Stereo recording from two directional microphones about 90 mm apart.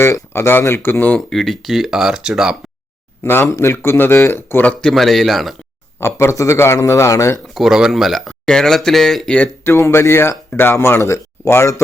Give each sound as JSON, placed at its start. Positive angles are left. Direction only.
{"t": 0.0, "sound": "speech", "side_deg": 30}
{"t": 1.3, "sound": "speech", "side_deg": 5}
{"t": 3.2, "sound": "speech", "side_deg": 25}
{"t": 6.0, "sound": "a man's voice", "side_deg": 30}
{"t": 7.3, "sound": "speech", "side_deg": 0}
{"t": 9.7, "sound": "speech", "side_deg": 30}